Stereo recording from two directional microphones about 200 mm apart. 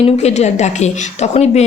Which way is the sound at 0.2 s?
35° left (ahead or behind).